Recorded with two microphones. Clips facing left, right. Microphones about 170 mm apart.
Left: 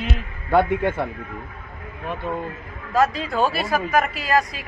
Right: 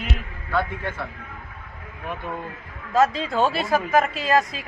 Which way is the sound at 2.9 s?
25° right (ahead or behind).